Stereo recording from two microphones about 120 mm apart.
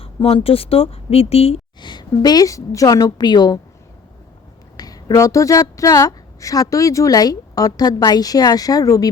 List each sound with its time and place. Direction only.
0.0 s a woman's voice: 50° left (ahead or behind)
1.8 s a woman's voice: 35° left (ahead or behind)
4.8 s a woman's voice: 30° left (ahead or behind)